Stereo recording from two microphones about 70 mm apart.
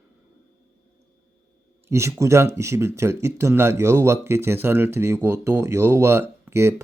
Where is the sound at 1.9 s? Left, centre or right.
Right.